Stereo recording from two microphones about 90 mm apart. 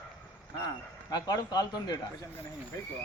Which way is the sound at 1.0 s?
45° left (ahead or behind).